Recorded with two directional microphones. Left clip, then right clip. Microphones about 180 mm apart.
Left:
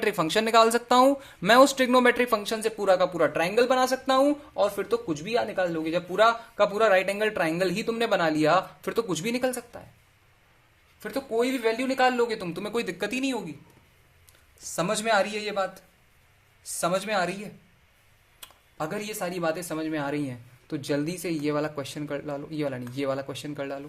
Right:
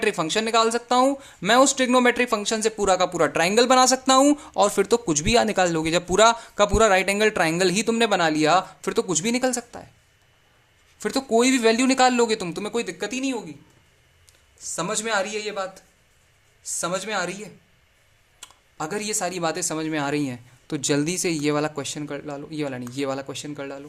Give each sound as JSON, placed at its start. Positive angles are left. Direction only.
{"t": 0.0, "sound": "speech", "side_deg": -5}
{"t": 11.0, "sound": "speech", "side_deg": -40}
{"t": 12.7, "sound": "speech", "side_deg": 0}
{"t": 14.6, "sound": "speech", "side_deg": 0}
{"t": 16.8, "sound": "speech", "side_deg": -10}